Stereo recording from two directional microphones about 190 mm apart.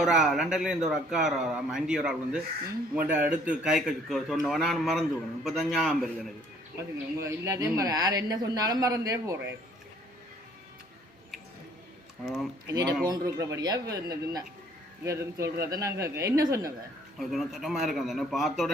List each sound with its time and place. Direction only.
0.0 s a man's voice: centre (ahead or behind)
6.7 s speech: 15° right (ahead or behind)
12.2 s a man's voice: centre (ahead or behind)
12.6 s speech: 20° right (ahead or behind)
17.2 s a man's voice: centre (ahead or behind)